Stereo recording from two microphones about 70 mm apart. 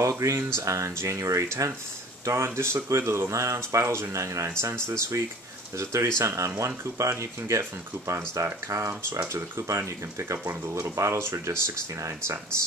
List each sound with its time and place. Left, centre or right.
0.0 s speech: right